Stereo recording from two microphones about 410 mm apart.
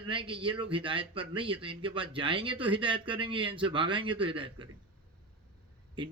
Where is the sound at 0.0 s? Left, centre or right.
Centre.